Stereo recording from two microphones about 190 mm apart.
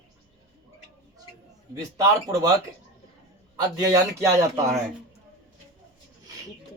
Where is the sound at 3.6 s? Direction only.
15° right (ahead or behind).